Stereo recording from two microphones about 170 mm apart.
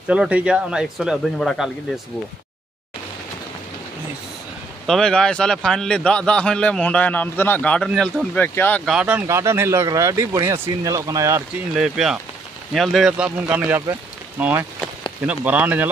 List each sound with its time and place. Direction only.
0.1 s a man's voice: 5° right (ahead or behind)
4.8 s a man's voice: centre (ahead or behind)
8.8 s speech: 5° right (ahead or behind)
11.7 s a man's voice: 5° right (ahead or behind)